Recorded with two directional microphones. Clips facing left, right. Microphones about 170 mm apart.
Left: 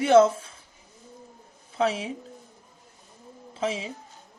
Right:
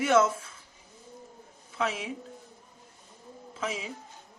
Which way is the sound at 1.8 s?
35° left (ahead or behind).